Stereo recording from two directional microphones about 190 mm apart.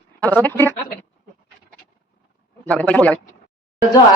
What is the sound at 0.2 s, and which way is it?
Speech, 10° left (ahead or behind).